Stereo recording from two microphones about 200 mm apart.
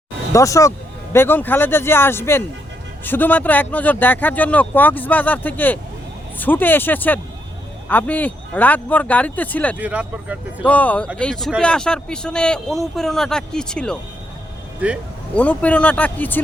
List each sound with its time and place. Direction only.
0.3 s speech: 15° left (ahead or behind)
9.7 s speech: 5° right (ahead or behind)
10.6 s speech: 5° left (ahead or behind)
14.8 s speech: 5° right (ahead or behind)
15.4 s speech: 5° left (ahead or behind)